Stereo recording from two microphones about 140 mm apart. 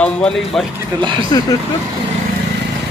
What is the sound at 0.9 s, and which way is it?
Speech, 35° right (ahead or behind).